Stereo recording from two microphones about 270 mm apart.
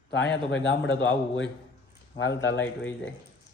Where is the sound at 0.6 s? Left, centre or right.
Left.